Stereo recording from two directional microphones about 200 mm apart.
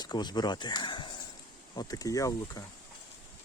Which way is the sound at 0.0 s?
20° left (ahead or behind).